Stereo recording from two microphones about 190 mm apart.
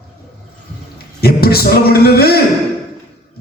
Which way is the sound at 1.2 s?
55° left (ahead or behind).